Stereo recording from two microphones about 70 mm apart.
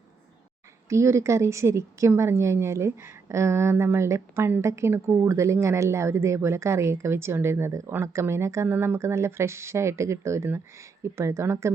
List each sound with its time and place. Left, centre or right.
0.9 s a woman's voice: right